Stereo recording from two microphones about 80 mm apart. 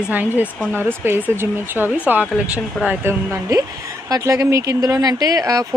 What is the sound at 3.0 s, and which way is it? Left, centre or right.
Speech, right.